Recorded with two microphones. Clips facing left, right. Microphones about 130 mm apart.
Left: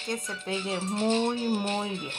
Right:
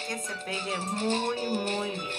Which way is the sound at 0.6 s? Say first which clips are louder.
Left 2 dB; 45° right (ahead or behind).